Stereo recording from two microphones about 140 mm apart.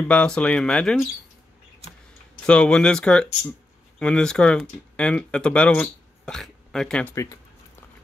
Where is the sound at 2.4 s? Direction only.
5° left (ahead or behind).